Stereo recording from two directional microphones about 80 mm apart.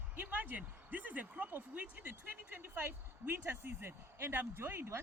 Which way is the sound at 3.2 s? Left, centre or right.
Right.